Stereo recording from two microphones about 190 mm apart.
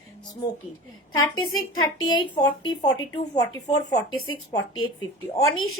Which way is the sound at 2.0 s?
20° left (ahead or behind).